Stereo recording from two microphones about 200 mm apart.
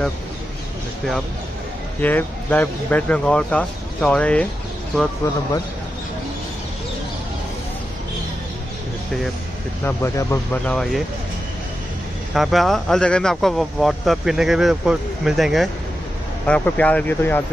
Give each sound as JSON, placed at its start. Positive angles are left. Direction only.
{"t": 2.0, "sound": "speech", "side_deg": 10}
{"t": 9.8, "sound": "speech", "side_deg": 15}
{"t": 12.4, "sound": "speech", "side_deg": 0}